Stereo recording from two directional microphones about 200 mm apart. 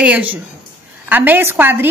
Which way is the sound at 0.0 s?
5° right (ahead or behind).